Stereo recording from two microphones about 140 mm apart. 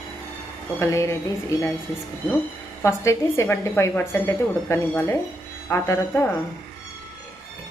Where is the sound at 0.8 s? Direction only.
20° left (ahead or behind).